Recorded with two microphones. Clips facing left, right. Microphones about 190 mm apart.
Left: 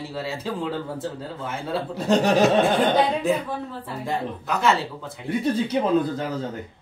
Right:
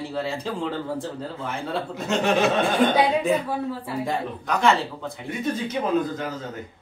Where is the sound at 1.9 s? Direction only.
35° left (ahead or behind).